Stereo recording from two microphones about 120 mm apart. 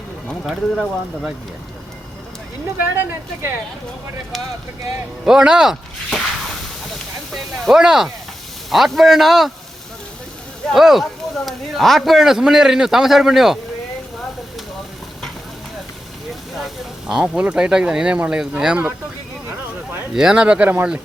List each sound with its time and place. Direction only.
0.4 s speech: centre (ahead or behind)
2.9 s speech: 20° right (ahead or behind)
5.2 s speech: 5° right (ahead or behind)
7.6 s speech: 5° right (ahead or behind)
10.7 s speech: centre (ahead or behind)
16.6 s speech: 5° right (ahead or behind)
20.1 s speech: 5° right (ahead or behind)